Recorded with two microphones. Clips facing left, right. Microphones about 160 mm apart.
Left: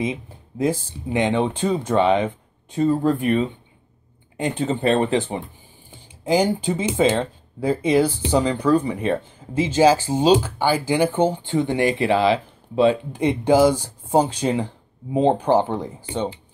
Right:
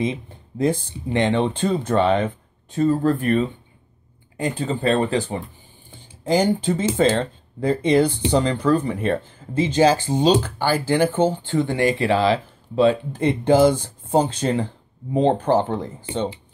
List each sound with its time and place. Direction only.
0.0 s speech: 10° left (ahead or behind)
5.9 s speech: 10° left (ahead or behind)